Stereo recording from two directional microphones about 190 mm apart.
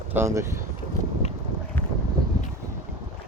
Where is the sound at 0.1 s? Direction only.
15° right (ahead or behind).